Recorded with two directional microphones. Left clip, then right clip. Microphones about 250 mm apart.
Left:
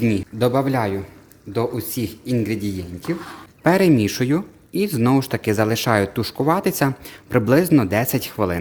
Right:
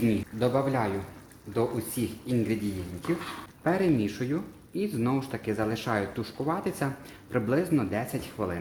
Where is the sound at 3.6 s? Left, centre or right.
Left.